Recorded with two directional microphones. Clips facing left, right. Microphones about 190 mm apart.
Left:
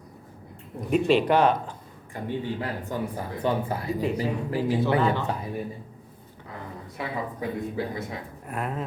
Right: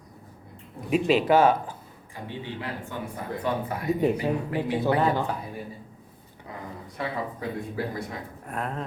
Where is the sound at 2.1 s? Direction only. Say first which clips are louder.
Left 6 dB; 45° left (ahead or behind).